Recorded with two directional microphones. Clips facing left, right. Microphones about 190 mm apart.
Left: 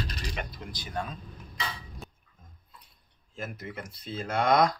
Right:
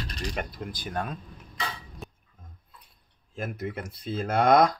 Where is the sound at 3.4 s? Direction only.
55° right (ahead or behind).